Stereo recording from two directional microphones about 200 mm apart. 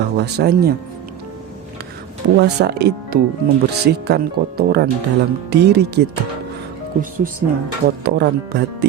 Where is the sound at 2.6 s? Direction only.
55° right (ahead or behind).